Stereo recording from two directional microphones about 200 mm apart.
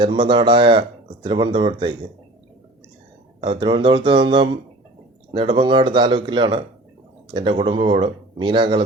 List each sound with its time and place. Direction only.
0.0 s speech: 25° right (ahead or behind)
3.4 s speech: 25° right (ahead or behind)